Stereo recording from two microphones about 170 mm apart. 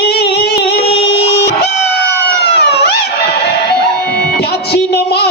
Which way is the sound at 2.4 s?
70° left (ahead or behind).